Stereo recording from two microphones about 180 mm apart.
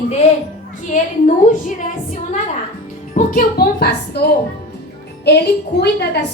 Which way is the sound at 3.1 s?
50° left (ahead or behind).